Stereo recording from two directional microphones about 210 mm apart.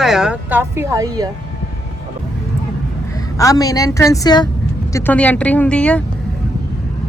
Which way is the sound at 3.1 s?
15° left (ahead or behind).